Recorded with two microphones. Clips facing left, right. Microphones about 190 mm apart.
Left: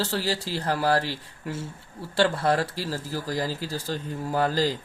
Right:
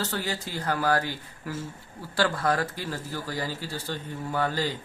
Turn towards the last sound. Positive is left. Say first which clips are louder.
# left 4 dB
turn(degrees=35)  # may be behind; listen again after turning